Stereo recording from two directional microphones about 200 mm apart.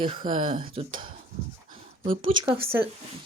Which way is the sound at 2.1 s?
25° right (ahead or behind).